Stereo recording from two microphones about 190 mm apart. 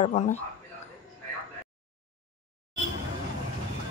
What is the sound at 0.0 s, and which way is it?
Speech, 35° left (ahead or behind).